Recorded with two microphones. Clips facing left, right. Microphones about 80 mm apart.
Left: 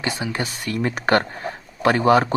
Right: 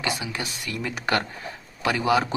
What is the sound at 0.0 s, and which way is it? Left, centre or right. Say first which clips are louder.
Speech: left 4 dB; left.